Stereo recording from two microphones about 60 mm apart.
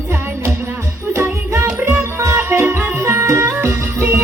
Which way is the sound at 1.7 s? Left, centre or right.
Right.